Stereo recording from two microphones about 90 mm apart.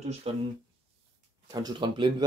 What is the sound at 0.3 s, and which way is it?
Speech, 90° right.